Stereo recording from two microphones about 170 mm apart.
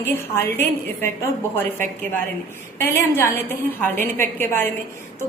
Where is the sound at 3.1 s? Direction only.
15° left (ahead or behind).